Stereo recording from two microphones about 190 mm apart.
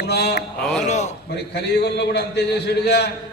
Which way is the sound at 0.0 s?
60° left (ahead or behind).